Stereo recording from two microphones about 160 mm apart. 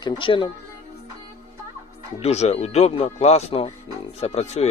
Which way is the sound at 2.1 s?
40° left (ahead or behind).